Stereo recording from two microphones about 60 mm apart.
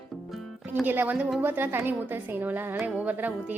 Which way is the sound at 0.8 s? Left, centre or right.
Right.